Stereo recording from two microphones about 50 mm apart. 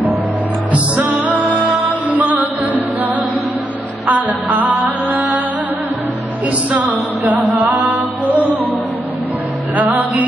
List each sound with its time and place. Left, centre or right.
0.7 s music: right
4.1 s mantra: right
6.7 s music: right
9.8 s music: right